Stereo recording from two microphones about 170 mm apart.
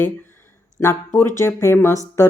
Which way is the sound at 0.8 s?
15° left (ahead or behind).